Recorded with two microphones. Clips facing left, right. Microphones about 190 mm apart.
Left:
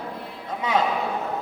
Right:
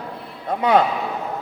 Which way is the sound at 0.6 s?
60° right (ahead or behind).